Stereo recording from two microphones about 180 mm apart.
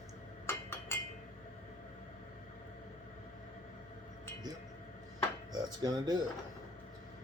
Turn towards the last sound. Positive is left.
turn(degrees=-20)  # may be behind; listen again after turning